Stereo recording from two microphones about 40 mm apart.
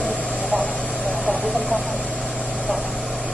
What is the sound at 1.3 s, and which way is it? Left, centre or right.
Vehicle, right.